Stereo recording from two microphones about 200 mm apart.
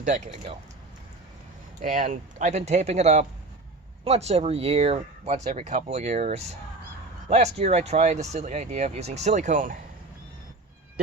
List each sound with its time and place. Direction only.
1.8 s speech: 40° right (ahead or behind)